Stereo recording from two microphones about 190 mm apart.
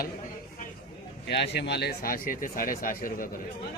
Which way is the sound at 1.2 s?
65° left (ahead or behind).